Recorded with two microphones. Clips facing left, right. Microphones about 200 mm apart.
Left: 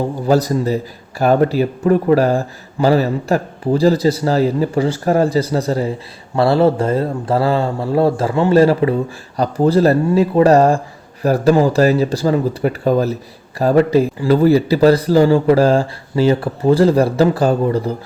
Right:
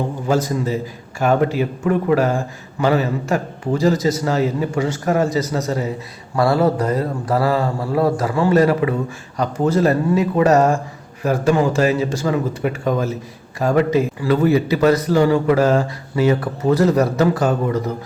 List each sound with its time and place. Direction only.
0.3 s a man's voice: 35° left (ahead or behind)